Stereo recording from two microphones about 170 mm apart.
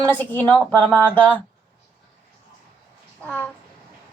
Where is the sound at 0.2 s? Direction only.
10° left (ahead or behind).